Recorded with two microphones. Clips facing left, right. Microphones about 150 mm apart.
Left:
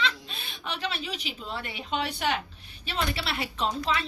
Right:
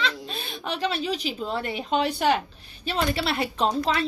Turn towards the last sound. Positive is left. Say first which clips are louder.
# right 5 dB
turn(degrees=-40)  # may be behind; listen again after turning